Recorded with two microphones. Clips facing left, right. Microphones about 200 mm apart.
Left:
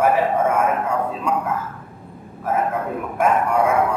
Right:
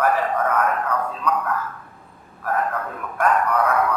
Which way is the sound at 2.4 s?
20° left (ahead or behind).